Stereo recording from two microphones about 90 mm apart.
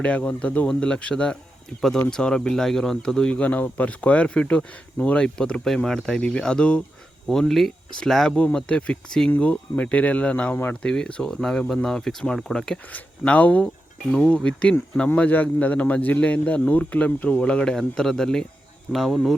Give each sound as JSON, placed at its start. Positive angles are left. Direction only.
{"t": 0.0, "sound": "speech", "side_deg": 15}